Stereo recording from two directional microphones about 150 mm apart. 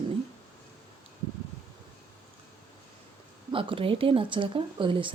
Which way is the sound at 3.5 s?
35° right (ahead or behind).